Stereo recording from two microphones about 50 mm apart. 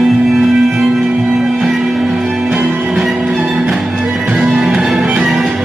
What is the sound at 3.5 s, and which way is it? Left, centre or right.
Music, right.